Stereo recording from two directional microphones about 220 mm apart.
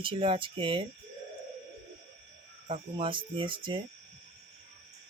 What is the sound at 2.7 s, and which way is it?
Speech, 25° right (ahead or behind).